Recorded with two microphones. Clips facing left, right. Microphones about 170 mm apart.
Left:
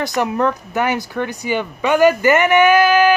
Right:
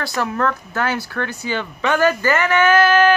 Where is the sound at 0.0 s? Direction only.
20° left (ahead or behind).